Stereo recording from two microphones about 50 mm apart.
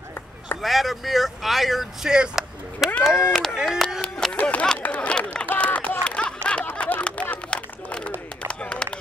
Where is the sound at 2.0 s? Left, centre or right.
Centre.